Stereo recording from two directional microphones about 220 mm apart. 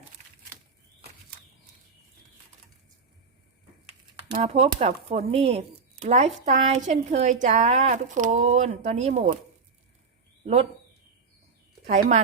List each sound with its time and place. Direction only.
4.3 s speech: 25° right (ahead or behind)
10.4 s speech: 30° right (ahead or behind)
11.9 s speech: 35° right (ahead or behind)